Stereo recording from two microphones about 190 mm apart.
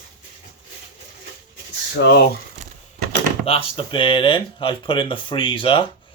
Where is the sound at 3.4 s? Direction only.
30° left (ahead or behind).